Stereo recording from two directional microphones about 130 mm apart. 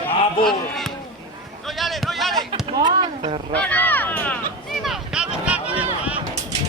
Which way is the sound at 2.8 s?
35° right (ahead or behind).